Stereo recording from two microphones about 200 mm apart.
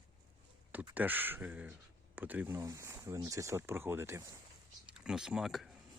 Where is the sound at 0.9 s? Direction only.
10° right (ahead or behind).